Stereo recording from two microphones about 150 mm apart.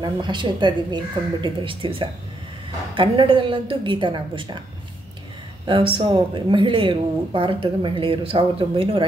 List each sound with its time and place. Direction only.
0.0 s a woman's voice: 30° right (ahead or behind)
5.7 s a woman's voice: 35° right (ahead or behind)